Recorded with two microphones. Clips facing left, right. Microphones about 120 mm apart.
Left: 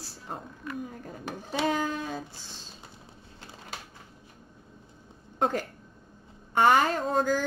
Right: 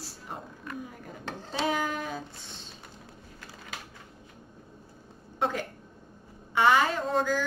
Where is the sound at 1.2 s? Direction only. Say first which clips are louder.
Even; 10° left (ahead or behind).